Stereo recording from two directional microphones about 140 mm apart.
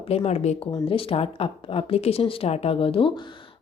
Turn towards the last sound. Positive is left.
turn(degrees=40)  # may be behind; listen again after turning